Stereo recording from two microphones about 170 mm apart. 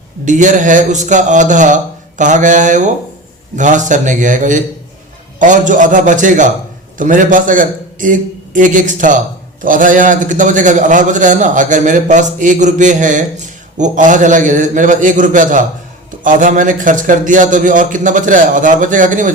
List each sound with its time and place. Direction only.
0.3 s a man's voice: 45° right (ahead or behind)